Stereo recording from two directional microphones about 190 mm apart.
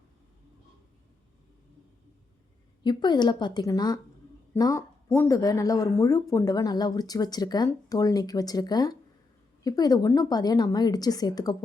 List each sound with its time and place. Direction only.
2.8 s speech: 25° left (ahead or behind)